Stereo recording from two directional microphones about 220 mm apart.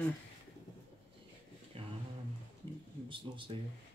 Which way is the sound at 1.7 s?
25° right (ahead or behind).